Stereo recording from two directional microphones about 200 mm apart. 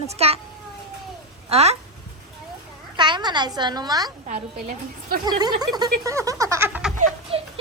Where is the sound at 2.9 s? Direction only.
20° right (ahead or behind).